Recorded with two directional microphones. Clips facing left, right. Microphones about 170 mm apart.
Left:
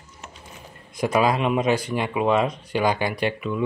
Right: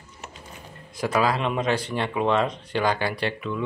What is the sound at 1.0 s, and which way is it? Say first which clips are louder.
Speech: left 3 dB; 20° left (ahead or behind).